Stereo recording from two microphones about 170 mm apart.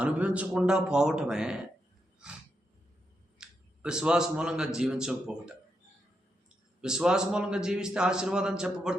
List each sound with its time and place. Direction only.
0.0 s a man's voice: 10° right (ahead or behind)
3.3 s speech: 5° right (ahead or behind)
6.8 s a man's voice: 5° right (ahead or behind)